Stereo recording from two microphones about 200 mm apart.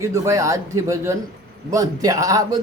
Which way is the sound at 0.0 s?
15° right (ahead or behind).